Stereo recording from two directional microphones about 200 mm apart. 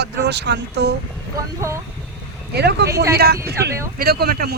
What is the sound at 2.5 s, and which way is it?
Speech, 55° right (ahead or behind).